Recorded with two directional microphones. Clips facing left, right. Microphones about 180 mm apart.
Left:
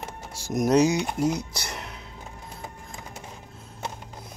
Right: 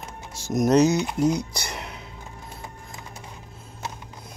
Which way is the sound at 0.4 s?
10° left (ahead or behind).